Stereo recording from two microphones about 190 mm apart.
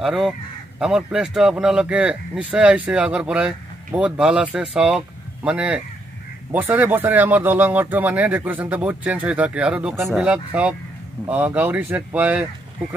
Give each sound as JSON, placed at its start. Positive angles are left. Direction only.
{"t": 0.0, "sound": "speech", "side_deg": 0}